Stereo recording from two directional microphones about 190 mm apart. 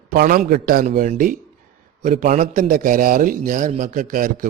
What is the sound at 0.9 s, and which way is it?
Speech, 40° right (ahead or behind).